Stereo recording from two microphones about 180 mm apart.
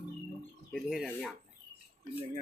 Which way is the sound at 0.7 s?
5° right (ahead or behind).